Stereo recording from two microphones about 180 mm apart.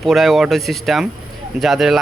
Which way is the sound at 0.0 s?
Centre (ahead or behind).